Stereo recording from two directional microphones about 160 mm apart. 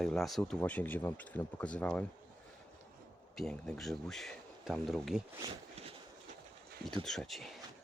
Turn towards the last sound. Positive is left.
turn(degrees=0)  # may be behind; listen again after turning